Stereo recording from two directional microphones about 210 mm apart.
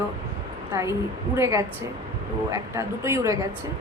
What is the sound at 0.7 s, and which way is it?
A woman's voice, 15° right (ahead or behind).